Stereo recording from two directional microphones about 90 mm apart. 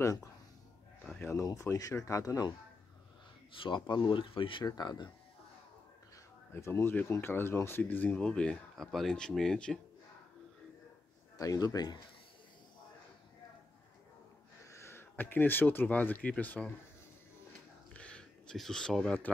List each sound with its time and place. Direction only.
0.0 s speech: 35° left (ahead or behind)
3.5 s speech: 65° left (ahead or behind)
4.6 s speech: 50° left (ahead or behind)
6.5 s speech: 25° left (ahead or behind); by 9.8 s 10° left (ahead or behind)
11.3 s speech: 45° left (ahead or behind)
14.7 s speech: 30° left (ahead or behind)
17.9 s a sound: 10° left (ahead or behind)